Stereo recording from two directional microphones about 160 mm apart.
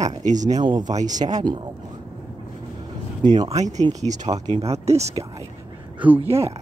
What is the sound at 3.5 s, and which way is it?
Speech, 45° right (ahead or behind).